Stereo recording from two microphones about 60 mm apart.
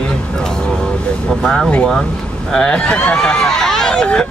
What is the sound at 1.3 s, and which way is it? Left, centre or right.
Speech, centre.